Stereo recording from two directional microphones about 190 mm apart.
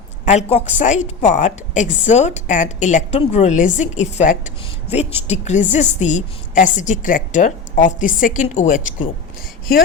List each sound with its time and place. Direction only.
0.3 s a woman's voice: 35° left (ahead or behind)